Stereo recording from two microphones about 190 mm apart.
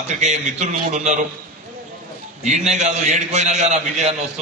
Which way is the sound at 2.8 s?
40° right (ahead or behind).